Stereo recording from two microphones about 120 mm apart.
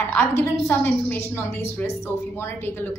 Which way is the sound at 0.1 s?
20° left (ahead or behind).